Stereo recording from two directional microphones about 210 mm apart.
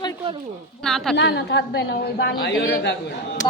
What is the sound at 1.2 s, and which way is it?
A woman's voice, 55° left (ahead or behind).